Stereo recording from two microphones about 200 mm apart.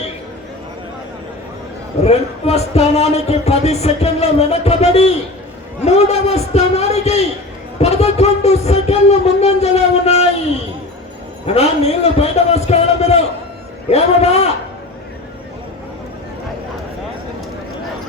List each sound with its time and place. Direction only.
2.0 s speech: 30° left (ahead or behind)
5.8 s a sound: 35° left (ahead or behind)
11.4 s a man's voice: 30° left (ahead or behind)